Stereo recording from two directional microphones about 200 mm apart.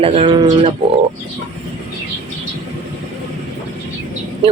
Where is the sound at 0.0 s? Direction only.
30° right (ahead or behind).